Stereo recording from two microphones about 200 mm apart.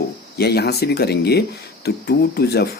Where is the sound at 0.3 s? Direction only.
55° left (ahead or behind).